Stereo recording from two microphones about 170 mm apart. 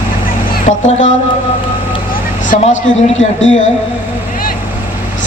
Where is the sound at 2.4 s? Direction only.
45° left (ahead or behind).